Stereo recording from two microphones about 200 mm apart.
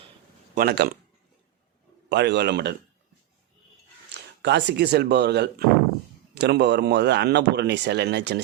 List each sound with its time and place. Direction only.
0.5 s speech: 50° right (ahead or behind)
2.0 s speech: 60° right (ahead or behind)
4.1 s a sound: 55° right (ahead or behind)
4.4 s speech: 60° right (ahead or behind)